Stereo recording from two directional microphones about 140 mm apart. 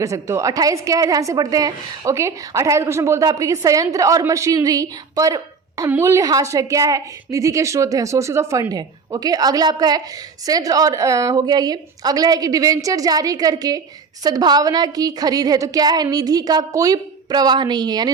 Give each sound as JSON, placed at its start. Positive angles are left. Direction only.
{"t": 0.0, "sound": "a woman's voice", "side_deg": -20}